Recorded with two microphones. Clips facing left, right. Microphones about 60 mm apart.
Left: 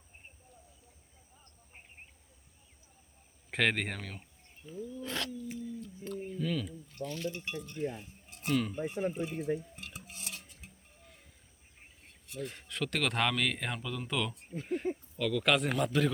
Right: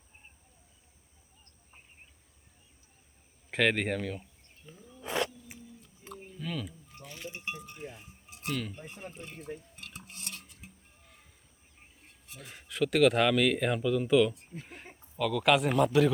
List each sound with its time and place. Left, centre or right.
3.5 s speech: centre
4.6 s a sound: centre
7.0 s speech: centre
7.9 s speech: centre
9.7 s music: centre
12.3 s speech: centre